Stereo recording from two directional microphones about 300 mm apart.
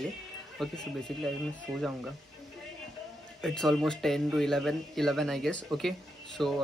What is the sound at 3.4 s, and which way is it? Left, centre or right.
Speech, centre.